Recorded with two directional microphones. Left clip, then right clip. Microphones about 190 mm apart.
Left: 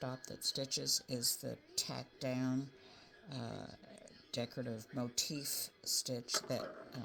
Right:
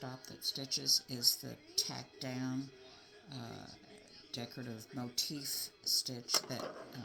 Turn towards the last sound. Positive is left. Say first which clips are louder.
# left 1 dB
turn(degrees=45)  # may be behind; listen again after turning